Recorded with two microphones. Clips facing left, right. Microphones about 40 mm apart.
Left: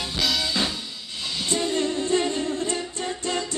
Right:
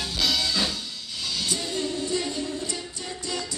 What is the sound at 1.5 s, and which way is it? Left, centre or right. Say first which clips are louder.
A capella: left 8 dB; left.